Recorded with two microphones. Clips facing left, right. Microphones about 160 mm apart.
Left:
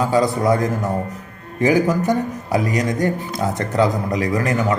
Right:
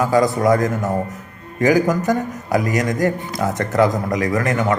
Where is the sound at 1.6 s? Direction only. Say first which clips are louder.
Right 1 dB; 30° left (ahead or behind).